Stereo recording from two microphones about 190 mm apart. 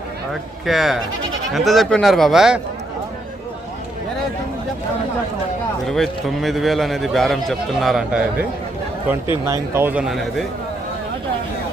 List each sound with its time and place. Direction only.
0.6 s a man's voice: centre (ahead or behind)
5.8 s a man's voice: centre (ahead or behind)
9.5 s speech: 10° right (ahead or behind)